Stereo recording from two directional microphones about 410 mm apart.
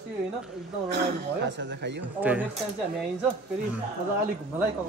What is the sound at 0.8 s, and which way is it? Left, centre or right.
Speech, right.